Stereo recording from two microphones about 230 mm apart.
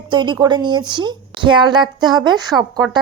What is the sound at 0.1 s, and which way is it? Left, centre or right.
A woman's voice, centre.